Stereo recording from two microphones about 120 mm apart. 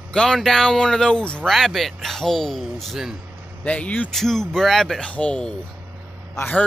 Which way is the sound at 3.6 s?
10° left (ahead or behind).